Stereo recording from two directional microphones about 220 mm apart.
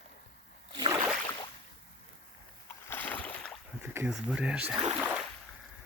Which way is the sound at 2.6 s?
10° left (ahead or behind).